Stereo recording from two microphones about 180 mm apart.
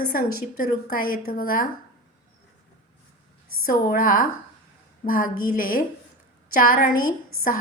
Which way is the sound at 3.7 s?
50° left (ahead or behind).